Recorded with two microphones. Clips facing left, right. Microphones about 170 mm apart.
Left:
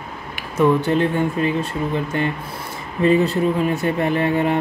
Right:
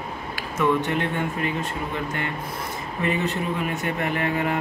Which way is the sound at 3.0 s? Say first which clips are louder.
Left 9 dB; 35° left (ahead or behind).